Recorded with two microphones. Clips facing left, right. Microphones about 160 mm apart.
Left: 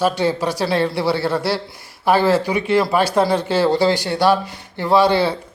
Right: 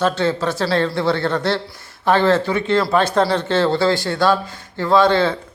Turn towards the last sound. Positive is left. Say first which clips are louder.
# even
turn(degrees=10)  # may be behind; listen again after turning